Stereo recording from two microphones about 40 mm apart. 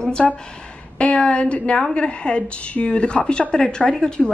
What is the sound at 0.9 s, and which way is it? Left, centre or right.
A woman's voice, left.